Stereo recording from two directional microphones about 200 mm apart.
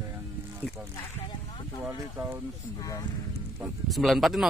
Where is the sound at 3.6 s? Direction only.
Centre (ahead or behind).